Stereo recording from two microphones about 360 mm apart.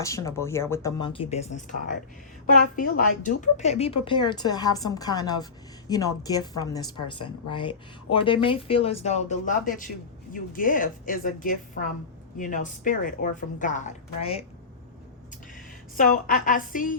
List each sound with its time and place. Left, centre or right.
0.0 s speech: centre
3.0 s a woman's voice: left
15.5 s a woman's voice: left